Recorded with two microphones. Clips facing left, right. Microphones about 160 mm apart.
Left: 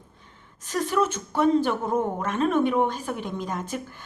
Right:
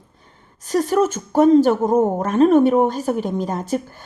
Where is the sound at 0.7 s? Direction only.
40° right (ahead or behind).